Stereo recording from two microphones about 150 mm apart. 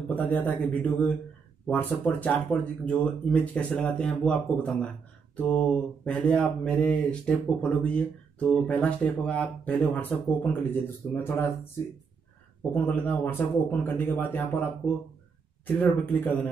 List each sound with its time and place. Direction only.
0.1 s speech: 10° left (ahead or behind)
12.7 s speech: 10° left (ahead or behind)